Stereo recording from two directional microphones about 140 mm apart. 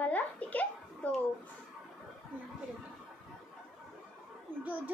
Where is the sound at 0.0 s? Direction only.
10° left (ahead or behind).